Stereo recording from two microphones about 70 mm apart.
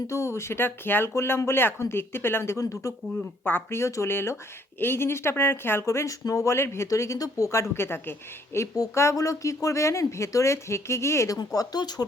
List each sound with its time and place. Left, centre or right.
0.1 s speech: left
3.4 s speech: left
8.5 s speech: left
11.3 s speech: left